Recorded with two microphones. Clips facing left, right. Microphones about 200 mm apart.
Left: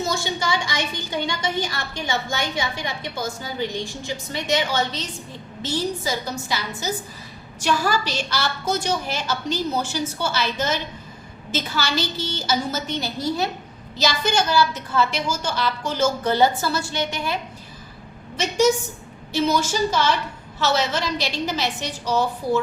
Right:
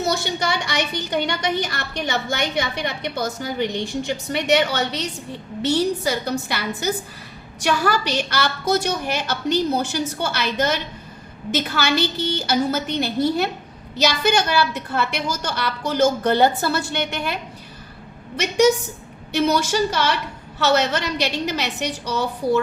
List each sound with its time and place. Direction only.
0.0 s a woman's voice: 65° right (ahead or behind)
19.3 s a woman's voice: 65° right (ahead or behind)